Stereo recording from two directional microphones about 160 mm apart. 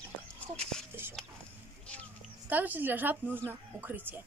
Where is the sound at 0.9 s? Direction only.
15° right (ahead or behind).